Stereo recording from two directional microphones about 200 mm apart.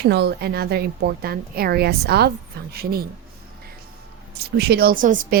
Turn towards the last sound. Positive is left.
turn(degrees=-40)  # may be behind; listen again after turning